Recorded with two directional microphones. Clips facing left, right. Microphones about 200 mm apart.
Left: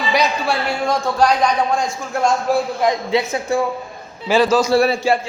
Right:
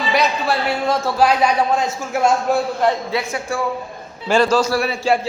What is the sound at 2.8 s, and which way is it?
Speech, 15° left (ahead or behind).